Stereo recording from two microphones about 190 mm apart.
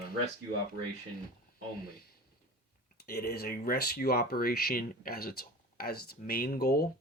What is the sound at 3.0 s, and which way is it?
Speech, 55° left (ahead or behind).